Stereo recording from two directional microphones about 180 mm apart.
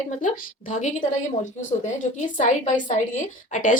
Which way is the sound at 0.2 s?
45° left (ahead or behind).